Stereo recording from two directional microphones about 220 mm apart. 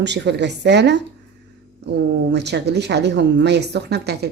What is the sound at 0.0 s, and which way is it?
Speech, 50° right (ahead or behind).